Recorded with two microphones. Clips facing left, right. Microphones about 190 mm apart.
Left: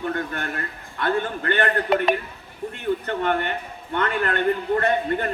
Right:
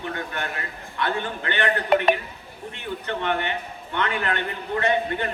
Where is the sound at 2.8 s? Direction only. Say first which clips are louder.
Left 4 dB; 45° left (ahead or behind).